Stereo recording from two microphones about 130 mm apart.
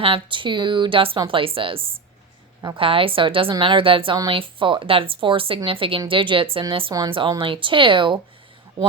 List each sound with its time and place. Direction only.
0.0 s a woman's voice: 40° right (ahead or behind)